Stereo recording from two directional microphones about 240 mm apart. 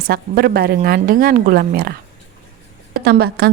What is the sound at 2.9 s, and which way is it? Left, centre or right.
Speech, right.